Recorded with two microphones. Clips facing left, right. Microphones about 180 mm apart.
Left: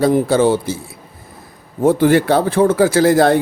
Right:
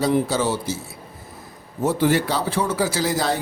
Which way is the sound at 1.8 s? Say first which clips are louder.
Left 7 dB; 55° left (ahead or behind).